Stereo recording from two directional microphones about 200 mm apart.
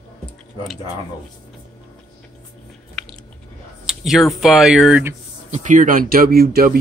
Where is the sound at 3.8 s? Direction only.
Centre (ahead or behind).